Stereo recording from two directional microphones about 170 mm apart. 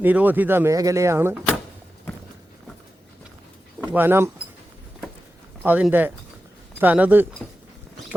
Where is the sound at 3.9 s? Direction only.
15° right (ahead or behind).